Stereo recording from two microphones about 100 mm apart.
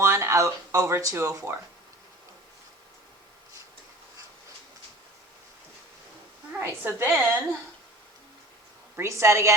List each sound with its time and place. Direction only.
0.0 s speech: 25° right (ahead or behind)
6.6 s a woman's voice: 20° right (ahead or behind)
9.0 s a woman's voice: 30° right (ahead or behind)